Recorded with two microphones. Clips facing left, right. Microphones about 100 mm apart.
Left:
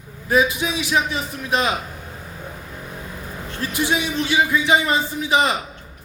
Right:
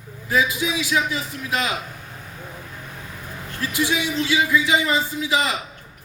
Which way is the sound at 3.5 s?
25° left (ahead or behind).